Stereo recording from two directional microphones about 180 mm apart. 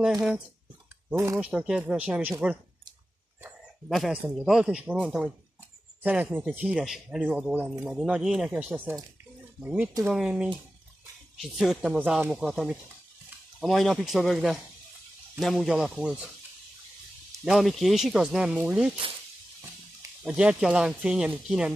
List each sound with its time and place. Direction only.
1.1 s speech: 15° right (ahead or behind)
1.4 s speech: 5° right (ahead or behind)
3.9 s speech: 5° right (ahead or behind)
17.5 s speech: centre (ahead or behind)
20.2 s speech: 5° right (ahead or behind)